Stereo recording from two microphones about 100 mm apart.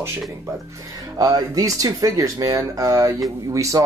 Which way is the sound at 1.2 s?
40° right (ahead or behind).